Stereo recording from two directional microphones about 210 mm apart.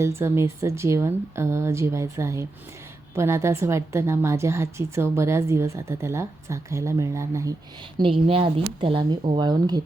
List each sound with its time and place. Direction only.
0.0 s a woman's voice: 10° right (ahead or behind)
7.9 s speech: 25° right (ahead or behind)